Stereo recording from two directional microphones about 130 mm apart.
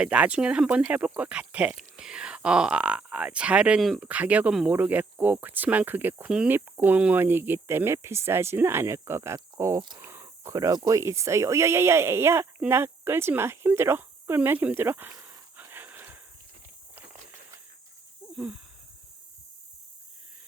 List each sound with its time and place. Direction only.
0.0 s speech: 10° right (ahead or behind)
4.0 s speech: 10° right (ahead or behind)
15.5 s wheeze: 15° right (ahead or behind)
16.9 s a sound: 15° right (ahead or behind)